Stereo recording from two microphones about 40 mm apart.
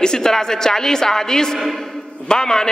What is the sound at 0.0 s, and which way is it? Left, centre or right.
A man's voice, centre.